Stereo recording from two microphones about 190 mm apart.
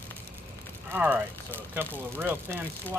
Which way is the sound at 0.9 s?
10° right (ahead or behind).